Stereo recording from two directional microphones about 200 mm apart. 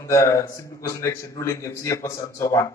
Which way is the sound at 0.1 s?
15° left (ahead or behind).